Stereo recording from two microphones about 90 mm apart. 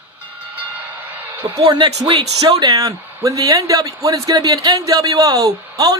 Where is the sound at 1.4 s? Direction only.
60° right (ahead or behind).